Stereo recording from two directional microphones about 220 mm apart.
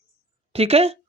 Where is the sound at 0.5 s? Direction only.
25° right (ahead or behind).